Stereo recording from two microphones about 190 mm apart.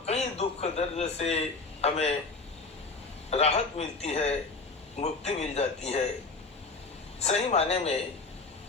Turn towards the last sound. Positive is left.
turn(degrees=35)  # may be behind; listen again after turning